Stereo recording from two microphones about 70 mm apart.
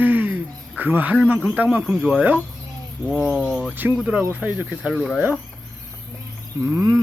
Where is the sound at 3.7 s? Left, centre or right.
Right.